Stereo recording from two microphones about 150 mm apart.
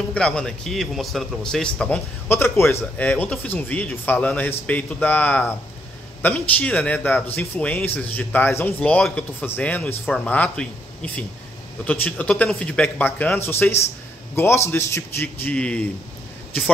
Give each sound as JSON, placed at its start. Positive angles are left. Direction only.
{"t": 0.1, "sound": "a man's voice", "side_deg": 5}